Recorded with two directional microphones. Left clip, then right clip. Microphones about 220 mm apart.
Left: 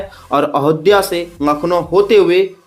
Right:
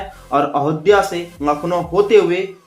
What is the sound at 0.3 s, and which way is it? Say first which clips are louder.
Speech: left 3 dB; 50° left (ahead or behind).